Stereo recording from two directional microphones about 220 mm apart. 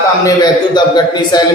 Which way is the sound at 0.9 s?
20° left (ahead or behind).